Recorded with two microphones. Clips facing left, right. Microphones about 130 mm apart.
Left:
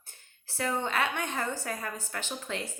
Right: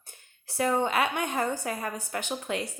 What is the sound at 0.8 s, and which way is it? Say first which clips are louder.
A woman's voice: right 4 dB; 15° right (ahead or behind).